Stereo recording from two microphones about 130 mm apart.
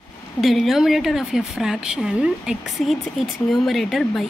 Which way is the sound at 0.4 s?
Centre (ahead or behind).